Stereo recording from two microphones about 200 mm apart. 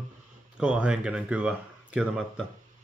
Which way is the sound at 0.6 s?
5° right (ahead or behind).